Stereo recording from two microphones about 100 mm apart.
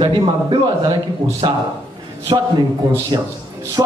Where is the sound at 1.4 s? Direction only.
55° right (ahead or behind).